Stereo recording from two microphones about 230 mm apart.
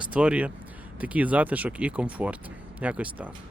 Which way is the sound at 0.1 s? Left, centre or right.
Centre.